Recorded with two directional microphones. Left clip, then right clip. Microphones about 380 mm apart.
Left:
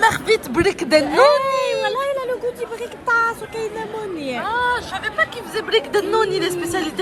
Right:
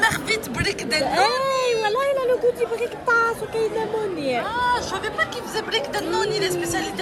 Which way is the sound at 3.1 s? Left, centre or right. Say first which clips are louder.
Left 2 dB; centre.